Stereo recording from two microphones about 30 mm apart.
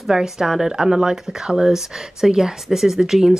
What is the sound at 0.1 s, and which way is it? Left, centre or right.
Speech, centre.